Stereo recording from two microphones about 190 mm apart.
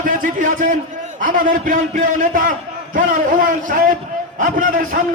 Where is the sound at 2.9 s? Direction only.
45° right (ahead or behind).